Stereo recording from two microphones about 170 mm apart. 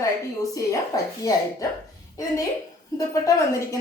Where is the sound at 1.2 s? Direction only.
20° left (ahead or behind).